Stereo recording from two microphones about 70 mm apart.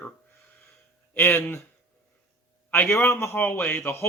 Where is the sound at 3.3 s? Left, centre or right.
Left.